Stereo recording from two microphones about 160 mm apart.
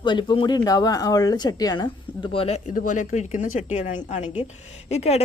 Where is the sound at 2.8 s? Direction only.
50° left (ahead or behind).